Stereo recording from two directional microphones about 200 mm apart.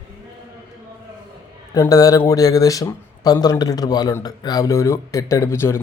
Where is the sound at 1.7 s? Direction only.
20° left (ahead or behind).